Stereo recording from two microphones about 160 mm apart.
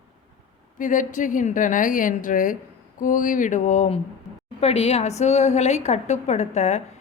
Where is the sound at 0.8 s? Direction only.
55° left (ahead or behind).